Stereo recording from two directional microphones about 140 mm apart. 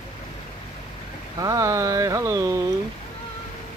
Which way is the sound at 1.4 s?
20° right (ahead or behind).